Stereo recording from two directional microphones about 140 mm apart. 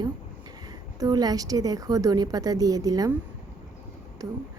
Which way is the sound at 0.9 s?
30° right (ahead or behind).